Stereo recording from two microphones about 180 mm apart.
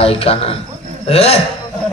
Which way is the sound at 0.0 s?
35° left (ahead or behind).